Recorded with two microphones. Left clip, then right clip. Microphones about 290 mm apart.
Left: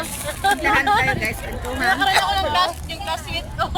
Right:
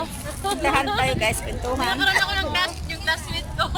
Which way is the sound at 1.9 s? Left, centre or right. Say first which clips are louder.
Left 4 dB; left.